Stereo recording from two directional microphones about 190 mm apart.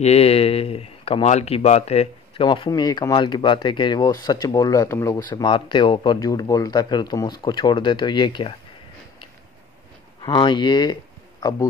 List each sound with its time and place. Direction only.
0.0 s speech: 35° left (ahead or behind)
10.2 s speech: 25° left (ahead or behind)